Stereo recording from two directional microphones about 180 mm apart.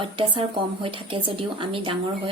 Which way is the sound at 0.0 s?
30° right (ahead or behind).